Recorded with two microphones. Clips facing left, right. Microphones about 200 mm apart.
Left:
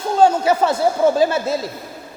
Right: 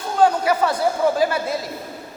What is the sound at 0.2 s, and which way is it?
A woman's voice, 25° left (ahead or behind).